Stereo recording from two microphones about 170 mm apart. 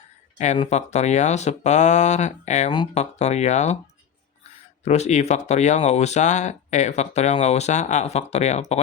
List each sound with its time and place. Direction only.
0.3 s speech: 45° left (ahead or behind)
2.7 s speech: 30° left (ahead or behind)
3.0 s speech: 40° left (ahead or behind)
4.8 s speech: 40° left (ahead or behind)